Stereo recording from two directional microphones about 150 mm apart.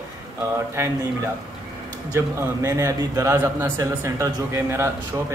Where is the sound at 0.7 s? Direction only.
15° right (ahead or behind).